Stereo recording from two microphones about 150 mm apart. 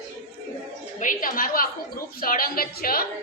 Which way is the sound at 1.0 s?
60° left (ahead or behind).